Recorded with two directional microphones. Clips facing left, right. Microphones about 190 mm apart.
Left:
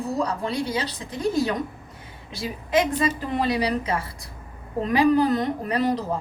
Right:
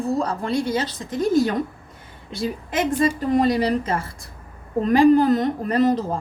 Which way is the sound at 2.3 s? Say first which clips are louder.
Left 1 dB; 50° right (ahead or behind).